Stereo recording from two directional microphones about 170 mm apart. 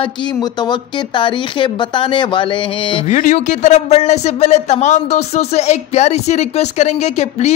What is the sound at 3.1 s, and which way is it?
Speech, 45° left (ahead or behind).